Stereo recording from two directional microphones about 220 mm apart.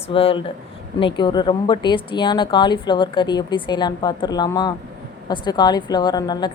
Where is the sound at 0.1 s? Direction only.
25° left (ahead or behind).